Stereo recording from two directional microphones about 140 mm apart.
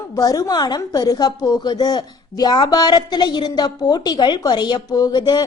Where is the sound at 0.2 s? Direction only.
25° left (ahead or behind).